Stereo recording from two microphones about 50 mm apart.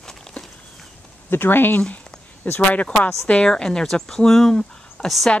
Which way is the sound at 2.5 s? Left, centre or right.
Left.